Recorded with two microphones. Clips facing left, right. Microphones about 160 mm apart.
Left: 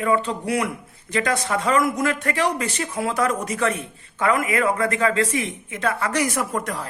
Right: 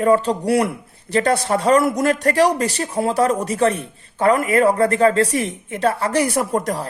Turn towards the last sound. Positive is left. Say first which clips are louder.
# right 5 dB
turn(degrees=-35)  # may be behind; listen again after turning